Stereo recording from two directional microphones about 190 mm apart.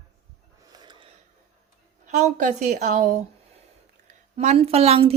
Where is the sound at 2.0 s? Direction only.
40° right (ahead or behind).